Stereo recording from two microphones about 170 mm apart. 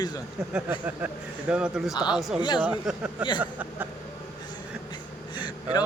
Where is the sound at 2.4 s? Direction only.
25° left (ahead or behind).